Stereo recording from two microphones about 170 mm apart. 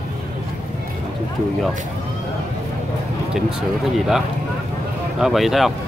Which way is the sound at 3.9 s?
Centre (ahead or behind).